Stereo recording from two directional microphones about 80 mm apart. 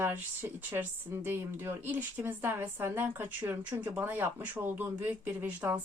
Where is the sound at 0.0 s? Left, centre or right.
Right.